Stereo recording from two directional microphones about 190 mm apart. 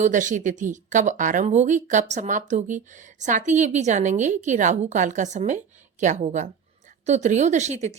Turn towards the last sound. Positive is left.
turn(degrees=-35)  # may be behind; listen again after turning